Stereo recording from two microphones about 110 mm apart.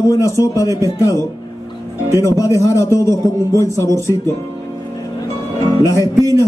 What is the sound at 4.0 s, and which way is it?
Speech, 25° left (ahead or behind).